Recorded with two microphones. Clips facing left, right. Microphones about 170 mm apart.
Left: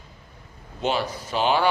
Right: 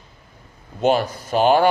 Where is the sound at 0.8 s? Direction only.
50° right (ahead or behind).